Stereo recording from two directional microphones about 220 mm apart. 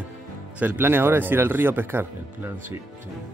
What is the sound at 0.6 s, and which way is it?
Speech, 10° right (ahead or behind).